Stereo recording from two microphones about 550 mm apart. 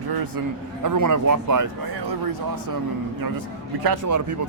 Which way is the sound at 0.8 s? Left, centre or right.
Right.